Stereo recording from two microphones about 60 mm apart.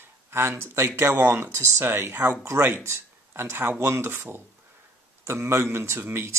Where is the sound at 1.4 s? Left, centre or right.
Right.